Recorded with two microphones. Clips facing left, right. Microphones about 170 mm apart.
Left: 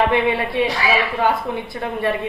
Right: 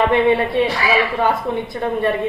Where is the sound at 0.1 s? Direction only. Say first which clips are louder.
Right 4 dB; 5° left (ahead or behind).